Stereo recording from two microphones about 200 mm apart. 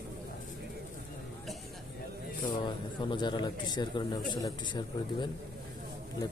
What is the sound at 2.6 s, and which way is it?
A man's voice, 25° left (ahead or behind).